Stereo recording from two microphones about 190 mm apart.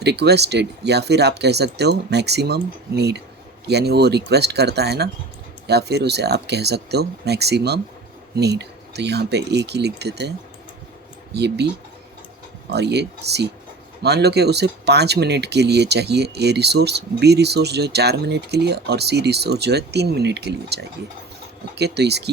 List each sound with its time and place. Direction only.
0.0 s speech: 60° right (ahead or behind)
11.3 s speech: 60° right (ahead or behind)
12.7 s speech: 60° right (ahead or behind)